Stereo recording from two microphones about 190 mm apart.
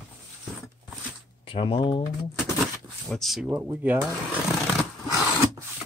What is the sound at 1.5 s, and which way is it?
Speech, 25° left (ahead or behind).